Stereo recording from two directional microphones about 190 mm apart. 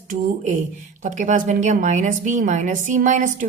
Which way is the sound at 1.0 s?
40° right (ahead or behind).